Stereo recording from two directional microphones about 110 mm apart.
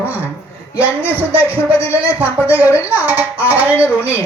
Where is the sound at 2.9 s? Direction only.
15° right (ahead or behind).